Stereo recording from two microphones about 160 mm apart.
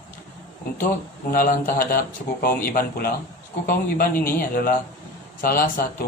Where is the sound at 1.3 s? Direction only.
65° left (ahead or behind).